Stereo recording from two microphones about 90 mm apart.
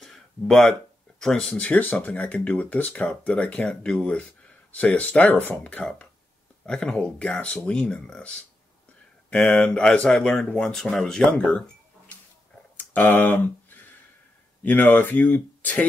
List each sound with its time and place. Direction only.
0.0 s a sound: 5° left (ahead or behind)
1.2 s speech: 10° left (ahead or behind)
12.7 s speech: 20° left (ahead or behind)
14.6 s speech: 20° left (ahead or behind)